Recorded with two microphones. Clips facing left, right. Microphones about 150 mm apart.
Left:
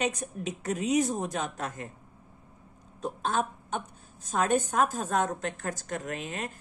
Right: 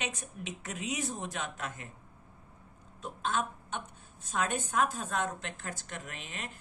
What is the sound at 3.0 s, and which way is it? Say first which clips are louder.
A woman's voice: left 4 dB; 40° left (ahead or behind).